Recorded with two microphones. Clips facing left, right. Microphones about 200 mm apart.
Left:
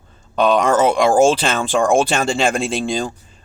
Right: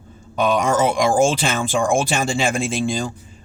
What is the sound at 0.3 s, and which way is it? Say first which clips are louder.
Speech: left 3 dB; 10° right (ahead or behind).